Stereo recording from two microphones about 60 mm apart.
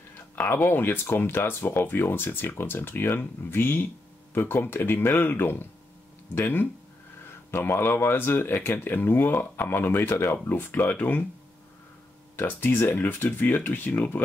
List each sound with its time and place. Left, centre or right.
0.4 s speech: left
10.3 s speech: left
12.4 s speech: left